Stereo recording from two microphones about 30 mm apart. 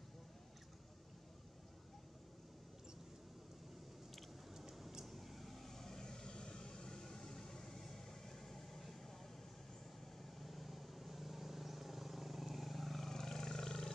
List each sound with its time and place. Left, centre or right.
4.6 s vehicle: centre
10.4 s vehicle: centre; by 13.9 s left